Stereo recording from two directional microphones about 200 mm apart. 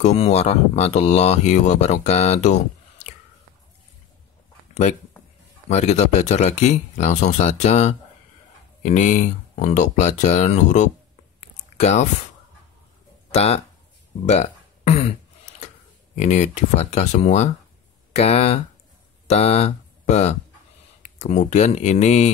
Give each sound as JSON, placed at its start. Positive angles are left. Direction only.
{"t": 0.0, "sound": "speech", "side_deg": 35}
{"t": 5.7, "sound": "speech", "side_deg": 35}
{"t": 13.3, "sound": "speech", "side_deg": 30}
{"t": 16.2, "sound": "speech", "side_deg": 35}